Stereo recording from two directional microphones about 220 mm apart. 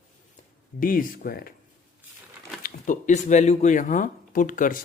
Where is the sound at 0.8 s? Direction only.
40° left (ahead or behind).